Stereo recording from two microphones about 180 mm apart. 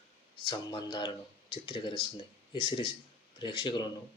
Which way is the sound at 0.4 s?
25° left (ahead or behind).